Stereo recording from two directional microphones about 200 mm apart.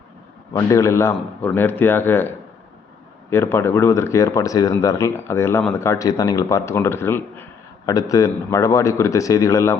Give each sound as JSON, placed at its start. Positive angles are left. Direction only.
{"t": 0.5, "sound": "speech", "side_deg": 15}